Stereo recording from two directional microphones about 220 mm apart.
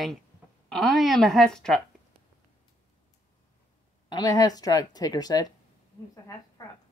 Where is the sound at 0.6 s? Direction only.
Centre (ahead or behind).